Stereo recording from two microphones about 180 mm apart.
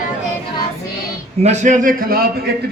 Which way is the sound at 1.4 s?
40° right (ahead or behind).